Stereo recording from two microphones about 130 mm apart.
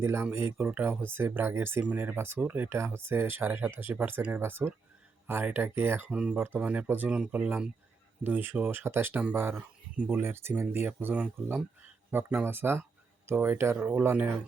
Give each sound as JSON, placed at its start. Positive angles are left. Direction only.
{"t": 0.0, "sound": "speech", "side_deg": -20}
{"t": 6.1, "sound": "speech", "side_deg": -5}